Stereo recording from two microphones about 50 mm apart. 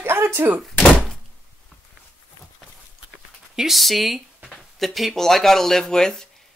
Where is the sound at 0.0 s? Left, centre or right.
Right.